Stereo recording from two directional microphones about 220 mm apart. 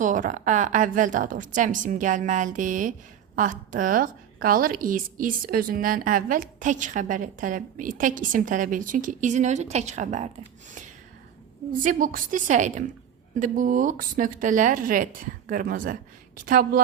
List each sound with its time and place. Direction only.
0.0 s a woman's voice: 35° right (ahead or behind)
11.7 s a woman's voice: 35° right (ahead or behind)